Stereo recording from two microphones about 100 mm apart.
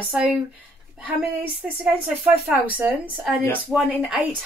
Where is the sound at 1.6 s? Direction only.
10° right (ahead or behind).